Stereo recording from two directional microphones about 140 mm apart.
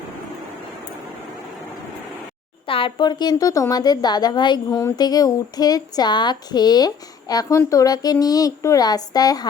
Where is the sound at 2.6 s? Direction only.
40° left (ahead or behind).